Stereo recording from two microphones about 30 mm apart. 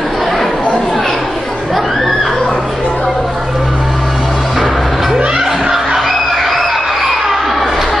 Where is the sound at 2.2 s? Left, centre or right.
Centre.